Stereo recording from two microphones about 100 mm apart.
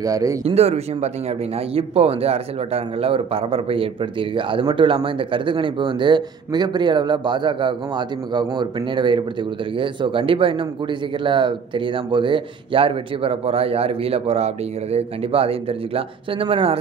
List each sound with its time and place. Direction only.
0.0 s speech: 35° right (ahead or behind)
0.5 s speech: 90° right
1.7 s a man's voice: 80° right